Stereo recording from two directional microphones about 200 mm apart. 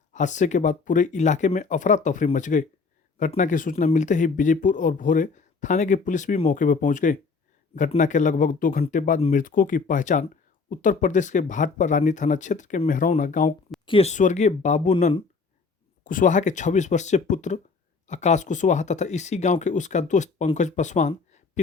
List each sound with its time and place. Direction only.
0.1 s speech: 40° left (ahead or behind)
13.8 s speech: 30° left (ahead or behind)